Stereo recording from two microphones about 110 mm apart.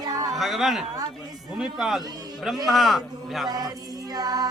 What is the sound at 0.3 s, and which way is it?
Speech, centre (ahead or behind).